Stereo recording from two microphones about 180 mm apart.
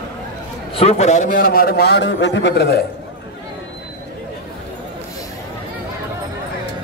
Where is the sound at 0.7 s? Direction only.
30° left (ahead or behind); by 2.8 s 65° left (ahead or behind).